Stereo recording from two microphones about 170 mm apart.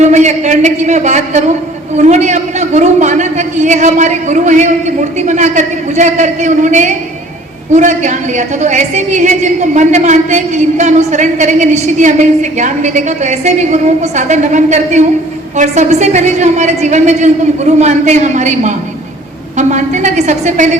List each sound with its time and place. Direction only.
0.0 s a woman's voice: 40° right (ahead or behind)